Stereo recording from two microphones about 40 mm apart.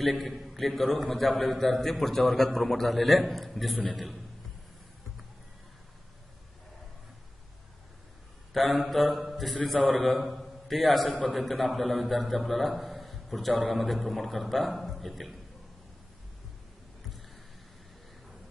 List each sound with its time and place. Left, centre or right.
0.0 s a man's voice: centre
8.5 s a man's voice: centre
9.8 s a man's voice: left
10.0 s a man's voice: centre
11.1 s a man's voice: left
11.3 s a man's voice: centre